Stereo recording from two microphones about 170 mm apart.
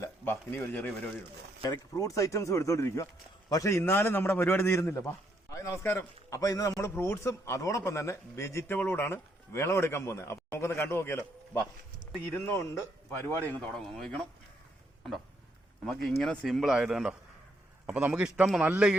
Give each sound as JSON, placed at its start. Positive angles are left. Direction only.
{"t": 0.0, "sound": "a sound", "side_deg": 10}
{"t": 1.6, "sound": "a man's voice", "side_deg": 20}
{"t": 15.8, "sound": "a man's voice", "side_deg": 0}